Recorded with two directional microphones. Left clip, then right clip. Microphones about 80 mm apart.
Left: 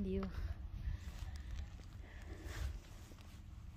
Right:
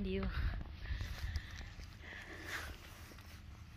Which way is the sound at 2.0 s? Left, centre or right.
Left.